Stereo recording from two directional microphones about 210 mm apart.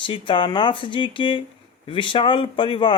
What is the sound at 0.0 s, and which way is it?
Speech, 25° left (ahead or behind).